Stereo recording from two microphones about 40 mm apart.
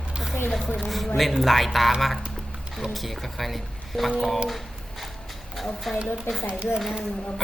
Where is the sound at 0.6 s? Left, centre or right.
Left.